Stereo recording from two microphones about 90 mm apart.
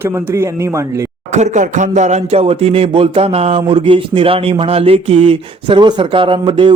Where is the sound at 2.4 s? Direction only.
90° right.